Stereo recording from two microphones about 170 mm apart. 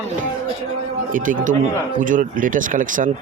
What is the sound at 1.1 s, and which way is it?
Speech, 50° right (ahead or behind).